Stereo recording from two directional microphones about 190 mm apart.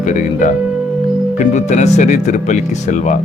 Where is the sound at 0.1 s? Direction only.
40° left (ahead or behind).